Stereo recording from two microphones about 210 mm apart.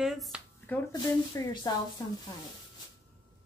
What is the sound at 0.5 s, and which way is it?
Speech, 10° left (ahead or behind).